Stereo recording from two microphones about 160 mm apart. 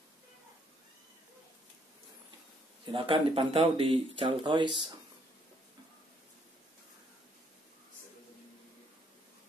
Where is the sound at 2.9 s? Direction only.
30° right (ahead or behind).